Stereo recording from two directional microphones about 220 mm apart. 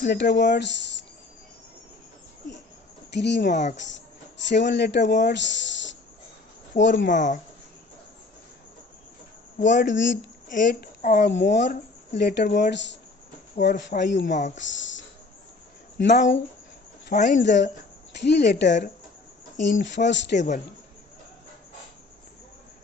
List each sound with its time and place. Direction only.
0.0 s speech: 50° left (ahead or behind)
3.2 s speech: 50° left (ahead or behind)
3.5 s speech: 35° left (ahead or behind)
4.4 s speech: 55° left (ahead or behind)
7.1 s speech: 35° left (ahead or behind)
9.6 s speech: 35° left (ahead or behind)
9.8 s speech: 55° left (ahead or behind)
10.5 s a woman's voice: 35° left (ahead or behind)
11.3 s speech: 55° left (ahead or behind)
14.3 s speech: 35° left (ahead or behind)
14.5 s speech: 55° left (ahead or behind)
17.1 s speech: 35° left (ahead or behind)
17.4 s speech: 55° left (ahead or behind)